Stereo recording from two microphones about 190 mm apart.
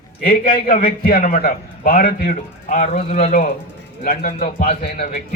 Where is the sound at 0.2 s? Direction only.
50° left (ahead or behind).